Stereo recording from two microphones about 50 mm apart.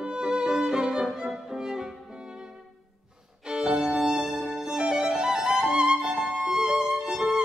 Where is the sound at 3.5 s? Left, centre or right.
Centre.